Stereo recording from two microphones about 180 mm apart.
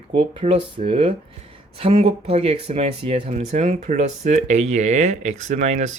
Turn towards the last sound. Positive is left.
turn(degrees=-40)  # may be behind; listen again after turning